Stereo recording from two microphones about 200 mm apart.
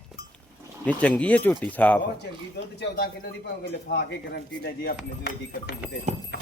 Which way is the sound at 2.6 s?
55° left (ahead or behind).